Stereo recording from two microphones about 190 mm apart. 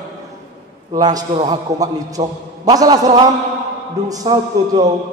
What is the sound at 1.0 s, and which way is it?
A man's voice, 20° right (ahead or behind).